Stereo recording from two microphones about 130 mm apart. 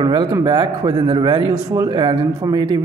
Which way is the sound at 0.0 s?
35° right (ahead or behind).